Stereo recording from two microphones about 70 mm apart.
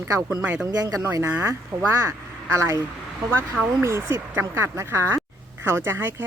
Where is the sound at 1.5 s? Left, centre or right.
Right.